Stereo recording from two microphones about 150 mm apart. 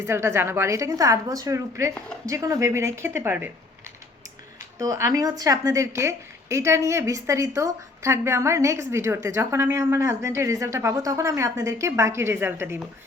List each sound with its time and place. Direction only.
0.0 s a woman's voice: 15° right (ahead or behind)
4.8 s a woman's voice: 20° right (ahead or behind)